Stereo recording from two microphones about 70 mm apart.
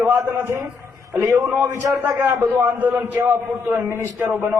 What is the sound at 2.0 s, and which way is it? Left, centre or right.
A man's voice, right.